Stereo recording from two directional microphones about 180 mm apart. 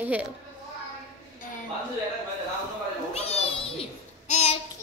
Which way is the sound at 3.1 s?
30° left (ahead or behind).